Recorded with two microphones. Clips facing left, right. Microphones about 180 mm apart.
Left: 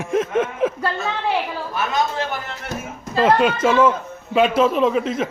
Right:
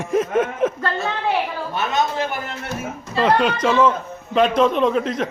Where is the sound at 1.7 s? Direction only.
25° right (ahead or behind).